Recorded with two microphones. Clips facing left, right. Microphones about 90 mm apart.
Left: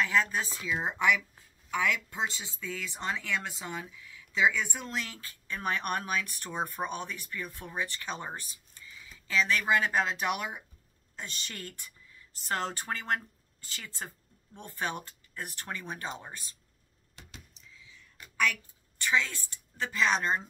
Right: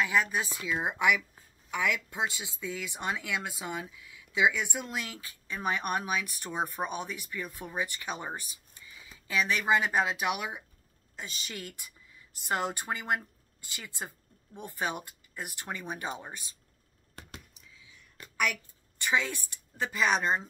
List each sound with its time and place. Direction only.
0.0 s speech: 10° right (ahead or behind)
17.2 s a sound: 55° right (ahead or behind)
18.4 s a woman's voice: 15° right (ahead or behind)